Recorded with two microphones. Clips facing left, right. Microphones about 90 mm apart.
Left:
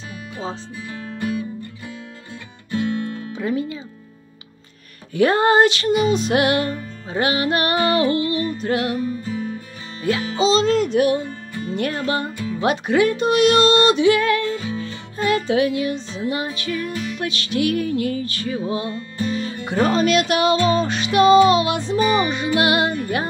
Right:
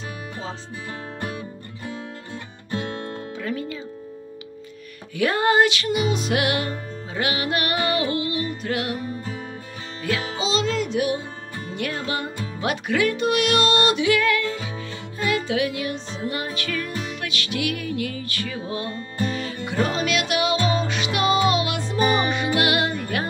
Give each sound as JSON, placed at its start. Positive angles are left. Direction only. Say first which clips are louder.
{"t": 2.3, "sound": "music", "louder": "left 5 dB", "side_deg": -40}
{"t": 3.3, "sound": "music", "louder": "left 6 dB", "side_deg": 20}
{"t": 5.1, "sound": "music", "louder": "left 4 dB", "side_deg": 35}
{"t": 10.3, "sound": "music", "louder": "left 9 dB", "side_deg": 35}
{"t": 12.5, "sound": "speech", "louder": "left 5 dB", "side_deg": 30}
{"t": 15.1, "sound": "music", "louder": "left 5 dB", "side_deg": 35}
{"t": 18.9, "sound": "music", "louder": "left 2 dB", "side_deg": -40}
{"t": 19.3, "sound": "music", "louder": "left 3 dB", "side_deg": 30}
{"t": 22.0, "sound": "music", "louder": "left 1 dB", "side_deg": -35}
{"t": 22.6, "sound": "music", "louder": "left 6 dB", "side_deg": 30}